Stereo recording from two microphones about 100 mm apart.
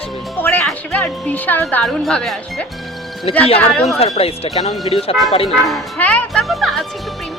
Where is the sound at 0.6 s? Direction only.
10° left (ahead or behind).